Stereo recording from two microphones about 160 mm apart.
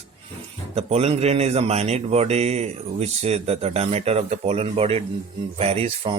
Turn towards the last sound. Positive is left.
turn(degrees=-40)  # may be behind; listen again after turning